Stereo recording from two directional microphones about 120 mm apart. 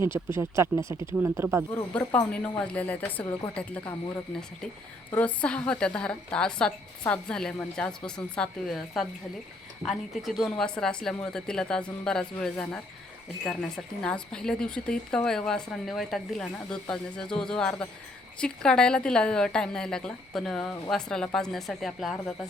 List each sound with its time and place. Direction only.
0.0 s speech: 20° right (ahead or behind)
2.0 s a woman's voice: 10° left (ahead or behind)
5.1 s a woman's voice: 10° left (ahead or behind)